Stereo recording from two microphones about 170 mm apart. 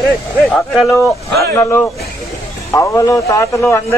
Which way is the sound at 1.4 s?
15° left (ahead or behind).